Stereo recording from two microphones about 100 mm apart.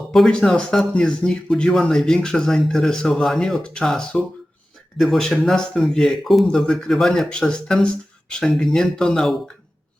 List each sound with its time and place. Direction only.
0.1 s speech: 5° left (ahead or behind)